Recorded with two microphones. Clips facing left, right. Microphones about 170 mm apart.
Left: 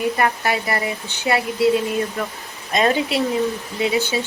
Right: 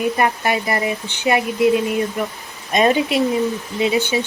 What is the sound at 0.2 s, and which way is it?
Speech, 20° right (ahead or behind).